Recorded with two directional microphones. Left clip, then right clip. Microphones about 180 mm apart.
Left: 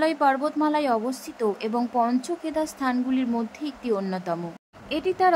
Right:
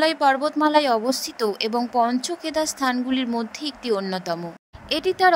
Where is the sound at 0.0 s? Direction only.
45° right (ahead or behind).